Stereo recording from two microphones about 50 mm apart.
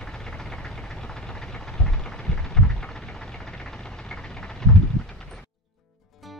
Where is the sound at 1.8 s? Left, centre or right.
Centre.